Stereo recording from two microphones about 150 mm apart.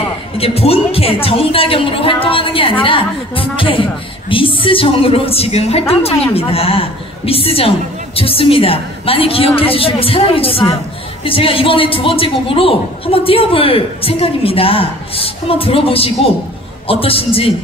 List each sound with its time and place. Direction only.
0.4 s a man's voice: 40° left (ahead or behind)